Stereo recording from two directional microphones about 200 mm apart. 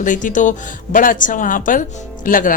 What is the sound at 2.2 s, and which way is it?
Speech, 40° left (ahead or behind).